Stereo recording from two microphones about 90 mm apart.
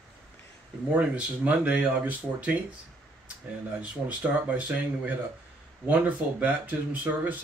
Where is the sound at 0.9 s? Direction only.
15° right (ahead or behind).